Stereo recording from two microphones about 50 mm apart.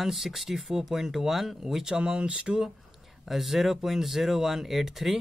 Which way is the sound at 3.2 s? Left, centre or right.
Centre.